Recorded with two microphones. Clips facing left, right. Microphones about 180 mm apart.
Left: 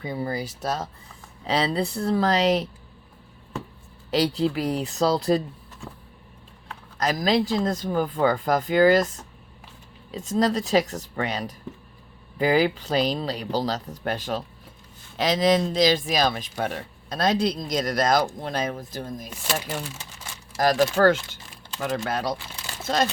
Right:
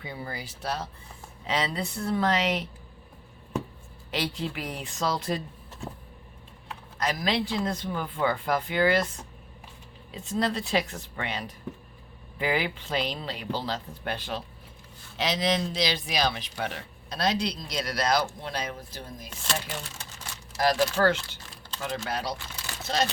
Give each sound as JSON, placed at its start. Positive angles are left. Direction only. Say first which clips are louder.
{"t": 0.0, "sound": "speech", "louder": "left 9 dB", "side_deg": 40}
{"t": 4.1, "sound": "speech", "louder": "left 9 dB", "side_deg": 40}
{"t": 7.0, "sound": "speech", "louder": "left 6 dB", "side_deg": 40}
{"t": 10.1, "sound": "speech", "louder": "left 5 dB", "side_deg": 40}
{"t": 20.6, "sound": "speech", "louder": "left 4 dB", "side_deg": 45}